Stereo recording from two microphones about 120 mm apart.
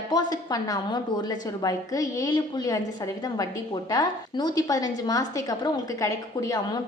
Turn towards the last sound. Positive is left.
turn(degrees=30)  # may be behind; listen again after turning